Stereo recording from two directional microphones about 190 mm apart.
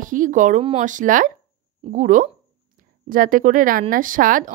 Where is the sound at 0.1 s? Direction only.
45° right (ahead or behind).